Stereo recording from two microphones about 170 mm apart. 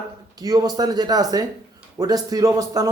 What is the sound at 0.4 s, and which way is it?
Speech, 20° right (ahead or behind).